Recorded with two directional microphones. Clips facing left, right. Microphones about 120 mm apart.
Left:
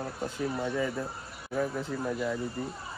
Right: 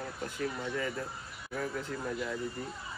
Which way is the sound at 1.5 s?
20° left (ahead or behind).